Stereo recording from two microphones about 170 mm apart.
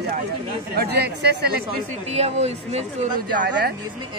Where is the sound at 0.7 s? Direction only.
70° right (ahead or behind).